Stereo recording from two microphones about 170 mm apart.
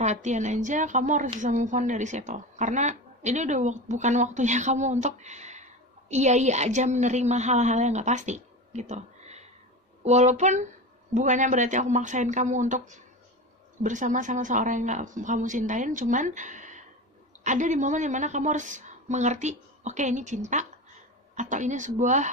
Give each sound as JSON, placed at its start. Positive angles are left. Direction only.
{"t": 0.0, "sound": "a woman's voice", "side_deg": -45}